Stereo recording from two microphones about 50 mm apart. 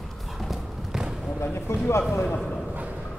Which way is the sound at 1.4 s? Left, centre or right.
Left.